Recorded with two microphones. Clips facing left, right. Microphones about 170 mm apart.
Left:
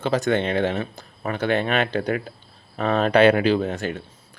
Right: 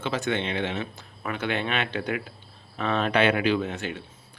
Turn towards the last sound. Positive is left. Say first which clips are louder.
# left 4 dB
turn(degrees=40)  # may be behind; listen again after turning